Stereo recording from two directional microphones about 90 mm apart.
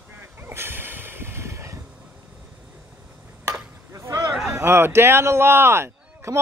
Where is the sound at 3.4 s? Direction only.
30° right (ahead or behind).